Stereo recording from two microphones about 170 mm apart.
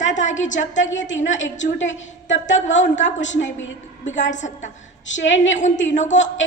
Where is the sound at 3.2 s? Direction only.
90° left.